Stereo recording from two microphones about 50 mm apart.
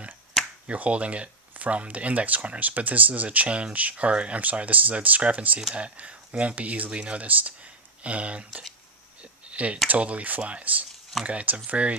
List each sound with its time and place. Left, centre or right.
0.7 s speech: right
9.2 s a sound: right
9.9 s speech: right